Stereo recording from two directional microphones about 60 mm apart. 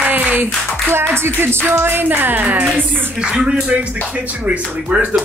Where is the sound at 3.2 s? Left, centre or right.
Centre.